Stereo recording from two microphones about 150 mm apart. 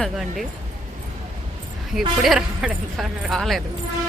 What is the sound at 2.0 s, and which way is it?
Speech, centre (ahead or behind).